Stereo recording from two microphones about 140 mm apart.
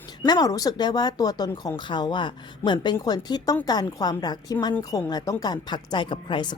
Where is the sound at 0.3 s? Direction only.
25° left (ahead or behind).